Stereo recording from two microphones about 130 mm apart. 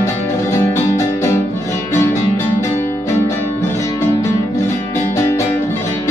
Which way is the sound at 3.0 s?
20° left (ahead or behind).